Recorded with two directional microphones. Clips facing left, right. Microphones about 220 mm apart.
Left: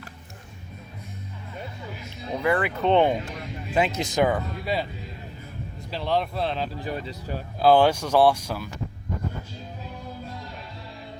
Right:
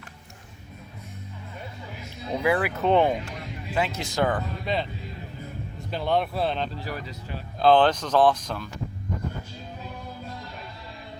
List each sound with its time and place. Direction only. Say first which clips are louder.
2.3 s speech: even; 5° right (ahead or behind)
3.8 s speech: left 3 dB; 20° left (ahead or behind)
5.9 s speech: right 1 dB; centre (ahead or behind)
6.7 s speech: left 3 dB; 20° left (ahead or behind)
7.6 s speech: left 1 dB; 10° left (ahead or behind)